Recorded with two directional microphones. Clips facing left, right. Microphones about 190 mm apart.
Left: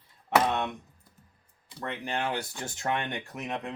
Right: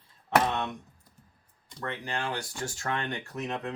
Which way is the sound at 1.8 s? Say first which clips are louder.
Left 2 dB; 20° left (ahead or behind).